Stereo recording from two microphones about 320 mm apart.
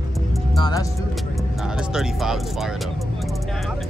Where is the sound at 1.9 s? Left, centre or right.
Centre.